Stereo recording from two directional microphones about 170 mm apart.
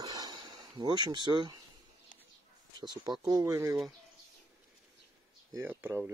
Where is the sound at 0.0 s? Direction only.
25° right (ahead or behind).